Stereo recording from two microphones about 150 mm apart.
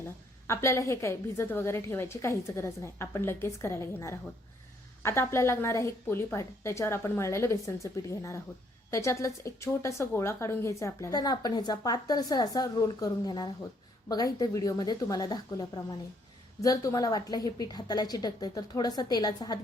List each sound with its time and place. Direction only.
0.0 s a woman's voice: 20° left (ahead or behind)